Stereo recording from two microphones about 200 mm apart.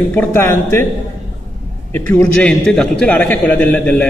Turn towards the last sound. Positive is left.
turn(degrees=5)  # may be behind; listen again after turning